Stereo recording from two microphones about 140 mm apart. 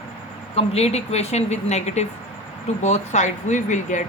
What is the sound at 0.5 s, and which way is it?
Speech, 45° left (ahead or behind).